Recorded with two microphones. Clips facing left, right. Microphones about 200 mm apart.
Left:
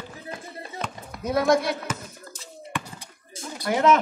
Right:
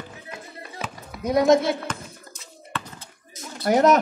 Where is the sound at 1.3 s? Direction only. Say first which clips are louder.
Right 4 dB; 20° right (ahead or behind).